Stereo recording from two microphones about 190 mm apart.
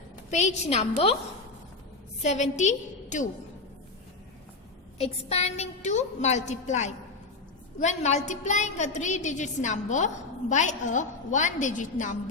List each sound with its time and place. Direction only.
0.3 s a woman's voice: 35° left (ahead or behind)
2.2 s a woman's voice: 40° left (ahead or behind)
4.9 s a woman's voice: 35° left (ahead or behind)